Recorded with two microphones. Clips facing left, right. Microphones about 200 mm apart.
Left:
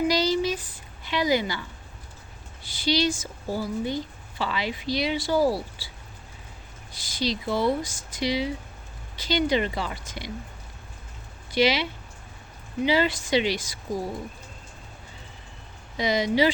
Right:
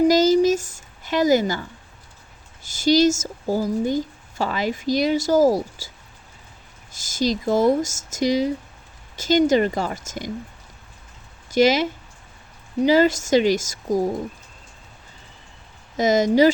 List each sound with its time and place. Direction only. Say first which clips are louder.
0.0 s a sound: right 8 dB; 45° right (ahead or behind)
2.6 s a woman's voice: right 8 dB; 45° right (ahead or behind)
6.9 s a woman's voice: right 6 dB; 45° right (ahead or behind)
11.5 s a woman's voice: right 6 dB; 45° right (ahead or behind)
16.0 s a woman's voice: right 6 dB; 45° right (ahead or behind)